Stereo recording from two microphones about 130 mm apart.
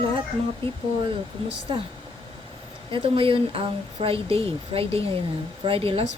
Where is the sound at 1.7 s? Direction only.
40° right (ahead or behind).